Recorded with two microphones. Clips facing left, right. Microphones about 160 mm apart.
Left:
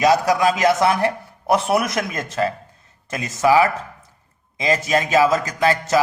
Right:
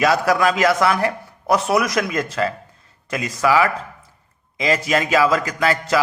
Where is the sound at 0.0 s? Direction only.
20° left (ahead or behind).